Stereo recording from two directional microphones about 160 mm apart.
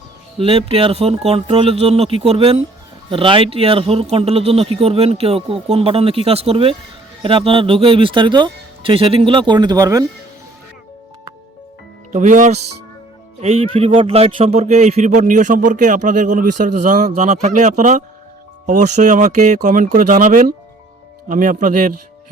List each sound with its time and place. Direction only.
0.3 s speech: 35° right (ahead or behind); by 10.1 s 20° right (ahead or behind)
12.1 s speech: 55° right (ahead or behind)
13.4 s speech: 40° right (ahead or behind); by 21.9 s 60° right (ahead or behind)